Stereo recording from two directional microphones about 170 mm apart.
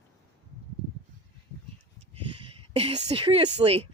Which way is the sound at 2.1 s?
35° right (ahead or behind).